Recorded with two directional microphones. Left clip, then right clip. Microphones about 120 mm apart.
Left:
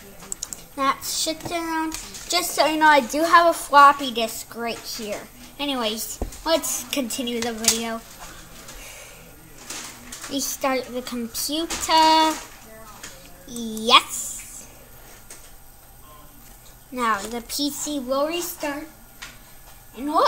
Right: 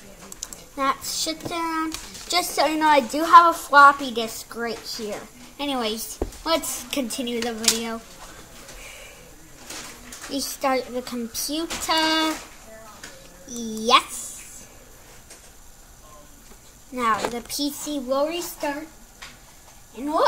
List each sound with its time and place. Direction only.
0.4 s speech: 20° right (ahead or behind)
10.3 s speech: 10° right (ahead or behind)
13.5 s a woman's voice: 5° right (ahead or behind)
16.9 s a woman's voice: 5° right (ahead or behind)
20.0 s a woman's voice: 5° right (ahead or behind)